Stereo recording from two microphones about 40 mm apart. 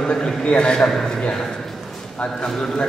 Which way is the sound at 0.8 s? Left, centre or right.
Centre.